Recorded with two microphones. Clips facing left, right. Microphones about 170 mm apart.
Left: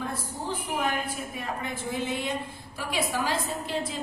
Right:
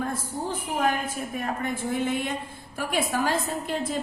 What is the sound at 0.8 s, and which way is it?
A woman's voice, 45° right (ahead or behind).